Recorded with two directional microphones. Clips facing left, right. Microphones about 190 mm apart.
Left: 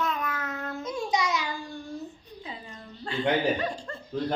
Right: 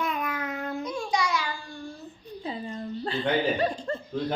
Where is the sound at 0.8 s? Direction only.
25° left (ahead or behind).